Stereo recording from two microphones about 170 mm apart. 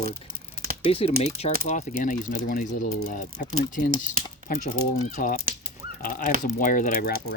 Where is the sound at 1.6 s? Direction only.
45° left (ahead or behind).